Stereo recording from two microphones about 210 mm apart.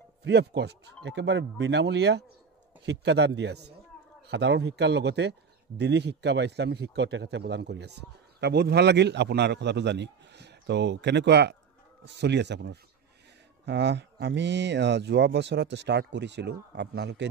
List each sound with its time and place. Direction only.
0.2 s a man's voice: 55° right (ahead or behind)